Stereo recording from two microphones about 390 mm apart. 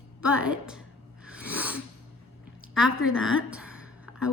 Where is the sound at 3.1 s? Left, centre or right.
Left.